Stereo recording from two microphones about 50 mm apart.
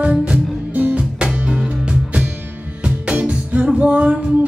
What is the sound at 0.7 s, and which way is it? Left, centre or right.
Music, right.